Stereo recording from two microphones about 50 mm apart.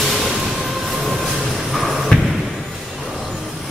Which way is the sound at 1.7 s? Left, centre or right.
Centre.